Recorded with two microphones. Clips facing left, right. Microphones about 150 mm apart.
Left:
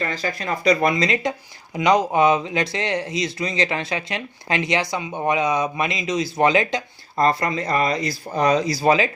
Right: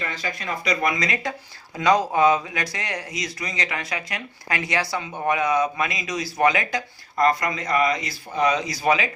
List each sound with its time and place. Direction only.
0.0 s speech: 35° left (ahead or behind)